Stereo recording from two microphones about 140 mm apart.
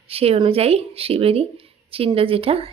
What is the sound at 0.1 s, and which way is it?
Speech, 45° right (ahead or behind).